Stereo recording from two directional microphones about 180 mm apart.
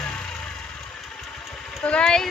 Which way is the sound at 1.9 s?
5° left (ahead or behind).